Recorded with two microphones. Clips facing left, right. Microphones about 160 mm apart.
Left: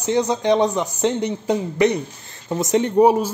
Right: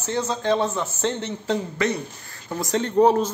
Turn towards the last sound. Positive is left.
turn(degrees=10)  # may be behind; listen again after turning